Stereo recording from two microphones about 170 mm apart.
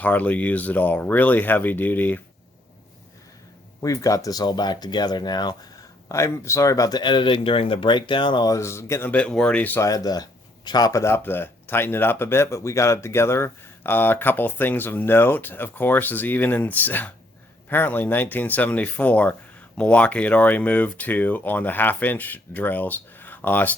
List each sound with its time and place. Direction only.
0.0 s speech: 10° left (ahead or behind)
3.8 s speech: 20° left (ahead or behind)